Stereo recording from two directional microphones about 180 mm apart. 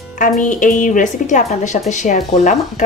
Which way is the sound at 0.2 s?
45° left (ahead or behind).